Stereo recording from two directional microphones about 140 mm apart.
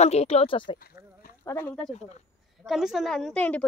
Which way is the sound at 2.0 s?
55° left (ahead or behind).